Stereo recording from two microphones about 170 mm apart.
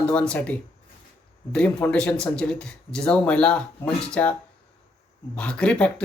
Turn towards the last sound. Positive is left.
turn(degrees=5)  # may be behind; listen again after turning